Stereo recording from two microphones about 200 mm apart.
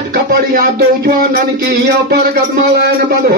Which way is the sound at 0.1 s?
45° right (ahead or behind).